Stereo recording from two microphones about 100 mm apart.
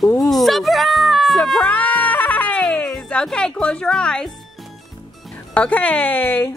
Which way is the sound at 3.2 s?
10° left (ahead or behind).